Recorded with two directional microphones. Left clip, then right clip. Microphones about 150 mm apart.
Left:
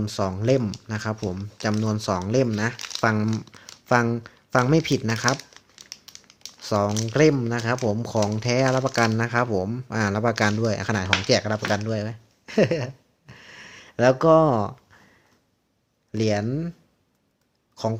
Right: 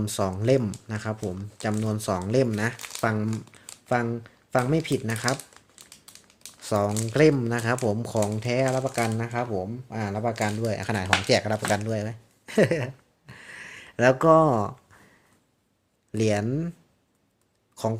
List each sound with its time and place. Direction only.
0.0 s speech: 10° left (ahead or behind)
1.1 s speech: 25° left (ahead or behind)
2.7 s crumpling: centre (ahead or behind)
3.0 s speech: 20° left (ahead or behind)
6.6 s speech: 10° left (ahead or behind)
11.7 s a sound: 10° left (ahead or behind)
16.1 s speech: 5° left (ahead or behind)
17.8 s speech: 5° left (ahead or behind)